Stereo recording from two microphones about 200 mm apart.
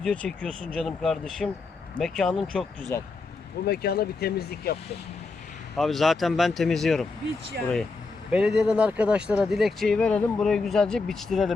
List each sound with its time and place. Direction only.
0.0 s speech: 5° left (ahead or behind)
2.9 s speech: 15° left (ahead or behind)
3.7 s speech: 50° left (ahead or behind)
5.7 s speech: centre (ahead or behind)
8.3 s speech: 5° right (ahead or behind)